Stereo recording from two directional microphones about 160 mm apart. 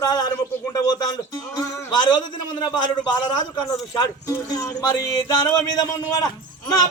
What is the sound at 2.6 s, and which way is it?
Speech, 25° left (ahead or behind).